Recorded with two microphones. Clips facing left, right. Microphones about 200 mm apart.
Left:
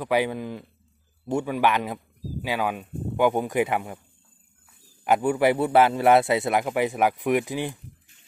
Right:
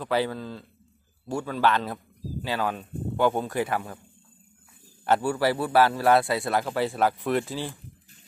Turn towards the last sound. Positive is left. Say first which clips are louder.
# left 3 dB
turn(degrees=15)  # may be behind; listen again after turning